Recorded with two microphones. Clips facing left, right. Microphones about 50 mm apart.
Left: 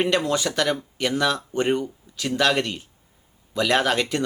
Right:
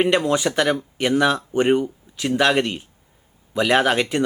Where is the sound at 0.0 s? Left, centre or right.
Centre.